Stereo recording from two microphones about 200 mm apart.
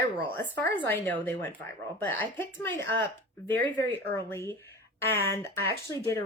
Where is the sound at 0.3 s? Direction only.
10° left (ahead or behind).